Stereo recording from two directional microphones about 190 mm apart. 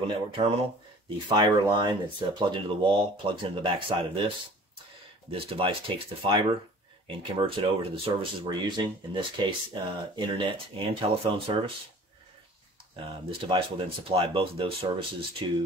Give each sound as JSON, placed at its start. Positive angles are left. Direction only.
{"t": 0.0, "sound": "speech", "side_deg": -30}
{"t": 5.3, "sound": "speech", "side_deg": -30}
{"t": 12.9, "sound": "speech", "side_deg": -25}